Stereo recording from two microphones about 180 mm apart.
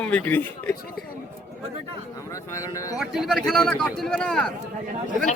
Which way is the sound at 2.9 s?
Centre (ahead or behind).